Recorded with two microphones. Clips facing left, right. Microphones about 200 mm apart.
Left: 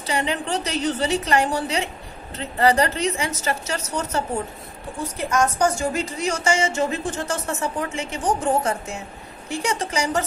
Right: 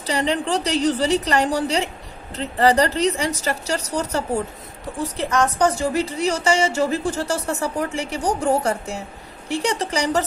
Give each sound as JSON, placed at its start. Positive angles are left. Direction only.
{"t": 0.0, "sound": "a woman's voice", "side_deg": -35}